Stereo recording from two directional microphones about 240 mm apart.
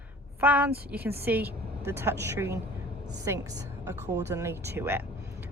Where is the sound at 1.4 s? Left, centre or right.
Right.